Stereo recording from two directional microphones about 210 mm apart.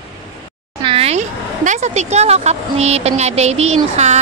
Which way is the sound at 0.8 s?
25° right (ahead or behind).